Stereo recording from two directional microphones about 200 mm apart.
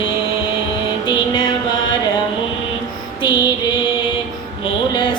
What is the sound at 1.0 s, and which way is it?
Music, 25° left (ahead or behind).